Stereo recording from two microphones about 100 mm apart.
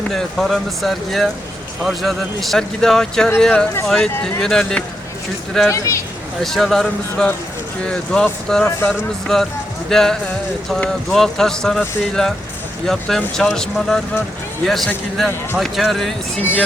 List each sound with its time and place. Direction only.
0.1 s speech: centre (ahead or behind)
5.6 s speech: 30° left (ahead or behind)
6.4 s speech: centre (ahead or behind)
16.4 s speech: 20° left (ahead or behind)